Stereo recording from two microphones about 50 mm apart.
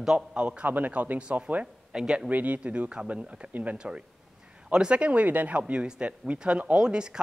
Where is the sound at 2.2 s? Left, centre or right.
Right.